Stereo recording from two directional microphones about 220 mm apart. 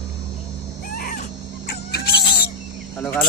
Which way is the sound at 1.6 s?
45° left (ahead or behind).